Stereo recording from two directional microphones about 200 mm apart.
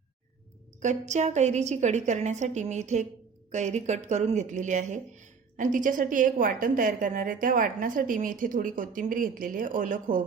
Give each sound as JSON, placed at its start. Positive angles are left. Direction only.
{"t": 0.8, "sound": "a woman's voice", "side_deg": -35}